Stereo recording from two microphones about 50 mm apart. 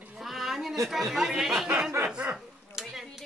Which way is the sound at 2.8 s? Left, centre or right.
Centre.